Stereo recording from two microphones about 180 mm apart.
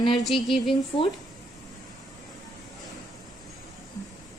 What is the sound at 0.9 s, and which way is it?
Speech, 25° left (ahead or behind).